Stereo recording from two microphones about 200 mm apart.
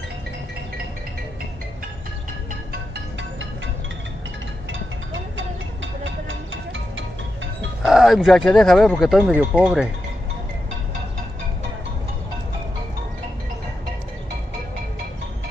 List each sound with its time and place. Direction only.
2.7 s music: 60° right (ahead or behind)
6.0 s music: 70° right (ahead or behind)
7.8 s speech: centre (ahead or behind)